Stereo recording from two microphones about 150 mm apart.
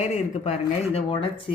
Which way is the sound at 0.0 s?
45° left (ahead or behind).